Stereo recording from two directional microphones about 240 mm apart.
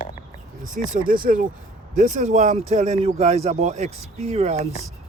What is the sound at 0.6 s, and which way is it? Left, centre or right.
Speech, right.